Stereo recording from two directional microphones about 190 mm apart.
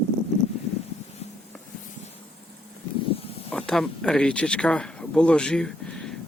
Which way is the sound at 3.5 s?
5° left (ahead or behind).